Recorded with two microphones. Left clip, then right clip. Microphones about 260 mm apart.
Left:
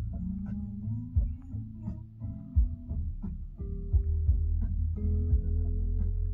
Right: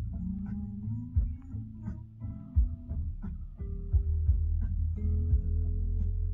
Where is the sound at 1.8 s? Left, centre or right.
Left.